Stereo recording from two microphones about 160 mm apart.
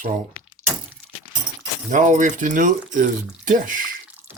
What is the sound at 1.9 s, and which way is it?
Speech, 50° right (ahead or behind).